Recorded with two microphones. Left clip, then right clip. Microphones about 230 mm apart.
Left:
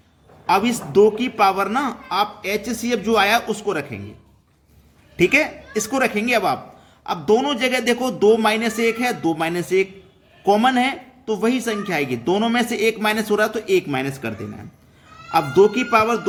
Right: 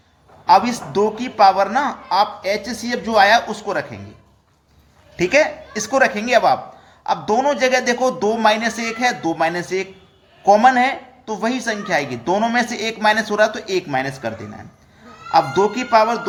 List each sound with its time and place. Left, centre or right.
0.4 s a man's voice: centre
5.1 s a man's voice: centre